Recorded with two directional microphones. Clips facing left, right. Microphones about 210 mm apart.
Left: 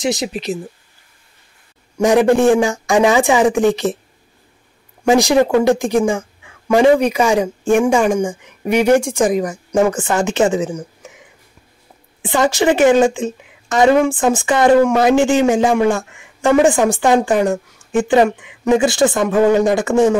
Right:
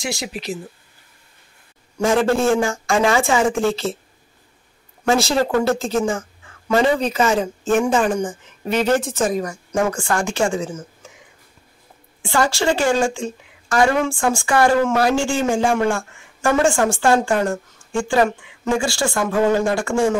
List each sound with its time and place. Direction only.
0.0 s a woman's voice: 20° left (ahead or behind)
2.0 s a woman's voice: 15° left (ahead or behind)
5.0 s a woman's voice: 15° left (ahead or behind)
12.2 s a woman's voice: 20° left (ahead or behind)